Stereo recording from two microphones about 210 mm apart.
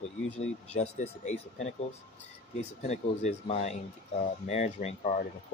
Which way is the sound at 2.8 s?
30° left (ahead or behind).